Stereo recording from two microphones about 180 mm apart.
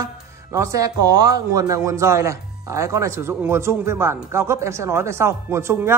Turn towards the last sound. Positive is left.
turn(degrees=-15)  # may be behind; listen again after turning